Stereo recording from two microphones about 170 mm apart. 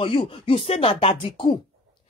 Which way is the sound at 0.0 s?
30° left (ahead or behind).